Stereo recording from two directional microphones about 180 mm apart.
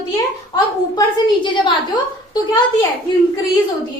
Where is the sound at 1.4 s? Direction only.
25° left (ahead or behind).